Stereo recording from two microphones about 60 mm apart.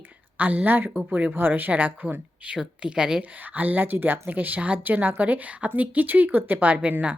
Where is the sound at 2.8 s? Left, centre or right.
Centre.